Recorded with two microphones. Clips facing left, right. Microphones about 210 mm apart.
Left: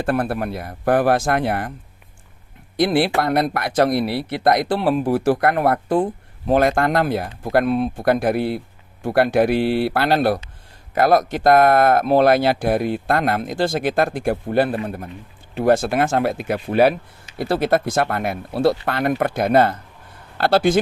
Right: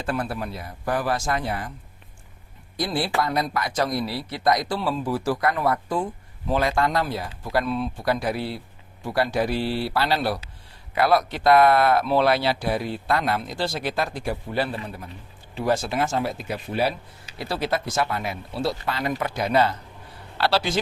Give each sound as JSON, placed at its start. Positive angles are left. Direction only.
{"t": 0.0, "sound": "speech", "side_deg": 55}
{"t": 2.7, "sound": "speech", "side_deg": 70}